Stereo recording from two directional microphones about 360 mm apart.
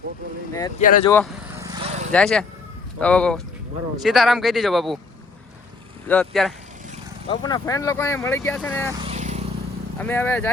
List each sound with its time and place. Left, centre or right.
0.8 s speech: left
1.1 s vehicle: centre
2.1 s speech: centre
6.1 s speech: centre
9.0 s vehicle: centre
10.0 s speech: centre